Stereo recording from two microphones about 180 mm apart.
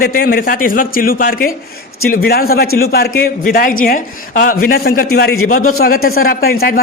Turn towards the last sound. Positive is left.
turn(degrees=55)  # may be behind; listen again after turning